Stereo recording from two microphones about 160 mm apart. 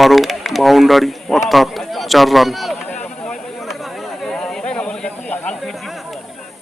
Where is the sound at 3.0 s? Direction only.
5° left (ahead or behind).